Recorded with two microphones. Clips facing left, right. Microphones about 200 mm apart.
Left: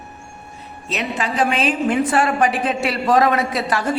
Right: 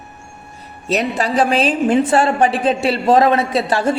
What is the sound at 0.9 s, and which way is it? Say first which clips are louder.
A woman's voice: right 6 dB; 40° right (ahead or behind).